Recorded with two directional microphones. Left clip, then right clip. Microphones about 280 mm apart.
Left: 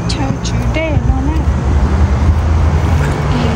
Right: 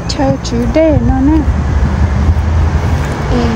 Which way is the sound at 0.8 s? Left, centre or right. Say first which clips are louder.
Right 9 dB; right.